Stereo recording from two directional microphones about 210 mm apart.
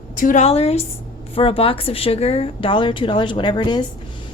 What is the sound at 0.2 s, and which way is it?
A woman's voice, 35° left (ahead or behind).